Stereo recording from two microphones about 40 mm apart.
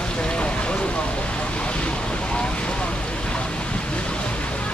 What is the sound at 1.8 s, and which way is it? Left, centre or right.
Vehicle, left.